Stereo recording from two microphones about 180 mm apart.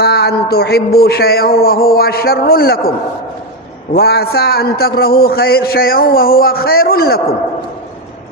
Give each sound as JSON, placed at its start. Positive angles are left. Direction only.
{"t": 0.0, "sound": "a man's voice", "side_deg": 65}
{"t": 3.9, "sound": "a man's voice", "side_deg": 60}